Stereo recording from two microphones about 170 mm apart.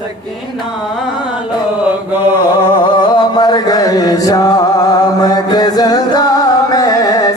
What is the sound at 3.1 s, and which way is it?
Chant, 25° left (ahead or behind).